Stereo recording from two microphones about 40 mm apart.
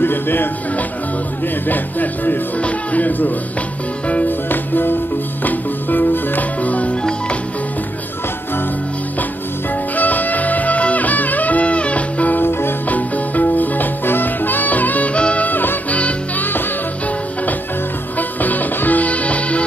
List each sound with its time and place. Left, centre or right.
0.0 s speech: left
1.7 s speech: left
4.3 s music: left
9.9 s music: left
12.4 s music: left
12.8 s music: left
15.4 s music: left
15.9 s music: left
18.1 s music: left